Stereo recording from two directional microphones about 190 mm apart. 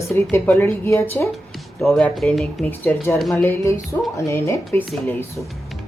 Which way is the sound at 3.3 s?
15° left (ahead or behind).